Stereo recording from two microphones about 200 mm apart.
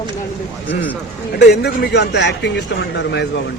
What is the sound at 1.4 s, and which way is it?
A man's voice, 55° left (ahead or behind).